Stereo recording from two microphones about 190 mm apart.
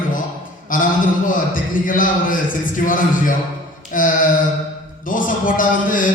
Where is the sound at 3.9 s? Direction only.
45° left (ahead or behind).